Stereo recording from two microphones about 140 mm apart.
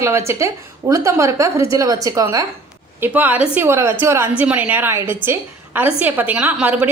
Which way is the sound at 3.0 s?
10° right (ahead or behind).